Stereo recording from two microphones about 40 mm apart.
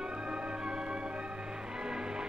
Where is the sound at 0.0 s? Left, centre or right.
Right.